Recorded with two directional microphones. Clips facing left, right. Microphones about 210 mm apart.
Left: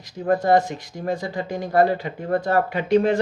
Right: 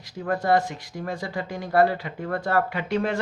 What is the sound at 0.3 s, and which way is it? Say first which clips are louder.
Speech: left 4 dB; 20° left (ahead or behind).